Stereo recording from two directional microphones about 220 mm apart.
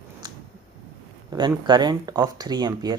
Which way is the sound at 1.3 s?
20° right (ahead or behind).